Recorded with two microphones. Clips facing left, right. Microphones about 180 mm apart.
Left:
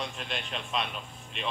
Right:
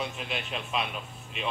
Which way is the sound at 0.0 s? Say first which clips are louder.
Right 2 dB; 5° right (ahead or behind).